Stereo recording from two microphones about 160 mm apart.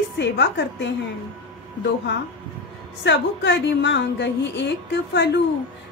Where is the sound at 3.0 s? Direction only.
90° left.